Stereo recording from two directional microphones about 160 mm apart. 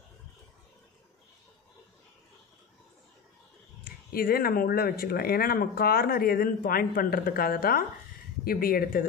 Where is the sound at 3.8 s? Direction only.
70° left (ahead or behind).